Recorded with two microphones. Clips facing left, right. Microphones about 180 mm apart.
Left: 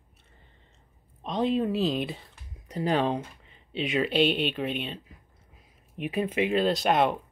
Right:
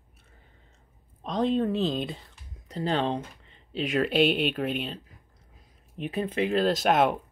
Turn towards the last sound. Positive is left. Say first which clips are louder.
# right 1 dB
turn(degrees=0)  # may be behind; listen again after turning